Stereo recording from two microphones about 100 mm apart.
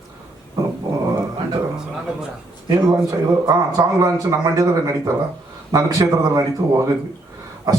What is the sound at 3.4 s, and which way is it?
A man's voice, 35° right (ahead or behind).